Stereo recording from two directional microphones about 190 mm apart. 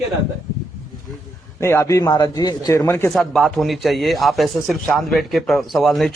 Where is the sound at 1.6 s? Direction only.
15° left (ahead or behind).